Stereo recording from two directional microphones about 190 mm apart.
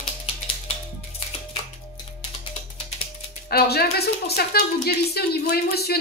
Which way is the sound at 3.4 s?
55° left (ahead or behind).